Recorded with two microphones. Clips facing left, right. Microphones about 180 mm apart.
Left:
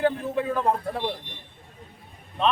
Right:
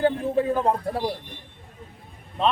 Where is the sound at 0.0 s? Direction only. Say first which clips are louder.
Right 3 dB; 35° right (ahead or behind).